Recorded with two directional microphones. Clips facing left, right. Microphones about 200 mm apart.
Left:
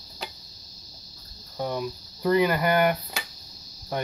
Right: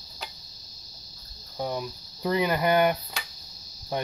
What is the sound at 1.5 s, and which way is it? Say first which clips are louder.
Cricket: left 2 dB; 10° right (ahead or behind).